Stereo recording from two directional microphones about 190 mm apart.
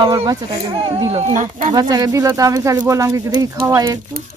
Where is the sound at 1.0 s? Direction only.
35° right (ahead or behind).